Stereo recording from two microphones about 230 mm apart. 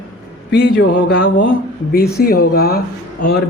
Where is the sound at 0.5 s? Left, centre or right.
Left.